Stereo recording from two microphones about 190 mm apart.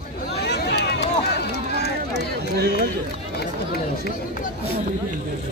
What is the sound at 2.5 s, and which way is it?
Speech, 60° right (ahead or behind).